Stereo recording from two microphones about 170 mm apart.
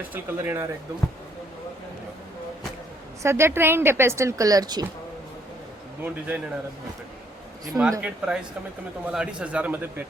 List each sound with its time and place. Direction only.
0.1 s a woman's voice: 10° right (ahead or behind)
3.2 s a woman's voice: 15° right (ahead or behind)
6.0 s a woman's voice: 5° right (ahead or behind)
7.7 s a woman's voice: centre (ahead or behind)